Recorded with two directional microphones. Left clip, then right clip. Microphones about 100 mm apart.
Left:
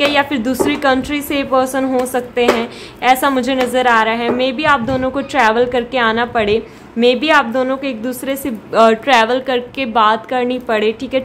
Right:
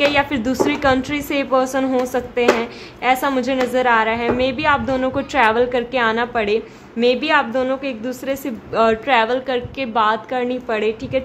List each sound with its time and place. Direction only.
0.0 s a woman's voice: 10° left (ahead or behind); by 11.2 s 25° left (ahead or behind)